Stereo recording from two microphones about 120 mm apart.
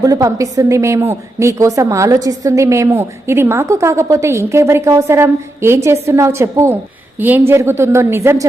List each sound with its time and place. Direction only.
0.0 s a woman's voice: 30° right (ahead or behind)